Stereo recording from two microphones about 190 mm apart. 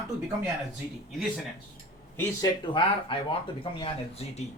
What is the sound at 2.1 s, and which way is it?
Speech, 25° left (ahead or behind).